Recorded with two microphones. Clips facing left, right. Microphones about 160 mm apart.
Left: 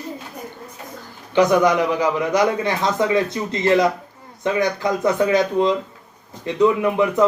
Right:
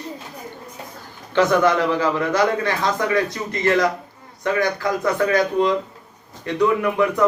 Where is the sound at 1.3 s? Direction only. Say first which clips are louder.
Left 1 dB; 15° left (ahead or behind).